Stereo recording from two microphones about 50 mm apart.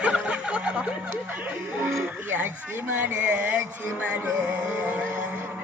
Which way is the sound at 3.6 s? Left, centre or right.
Right.